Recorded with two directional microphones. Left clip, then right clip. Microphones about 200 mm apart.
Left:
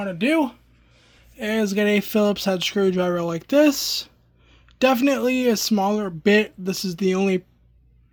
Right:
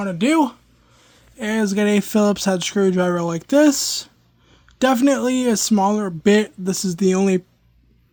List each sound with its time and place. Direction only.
0.0 s speech: 20° right (ahead or behind)